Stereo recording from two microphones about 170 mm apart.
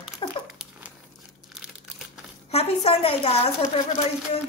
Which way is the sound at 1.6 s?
5° right (ahead or behind).